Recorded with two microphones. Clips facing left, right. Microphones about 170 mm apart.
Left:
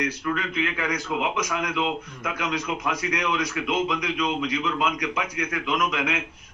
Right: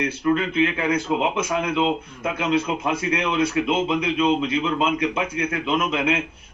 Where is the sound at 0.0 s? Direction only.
25° right (ahead or behind).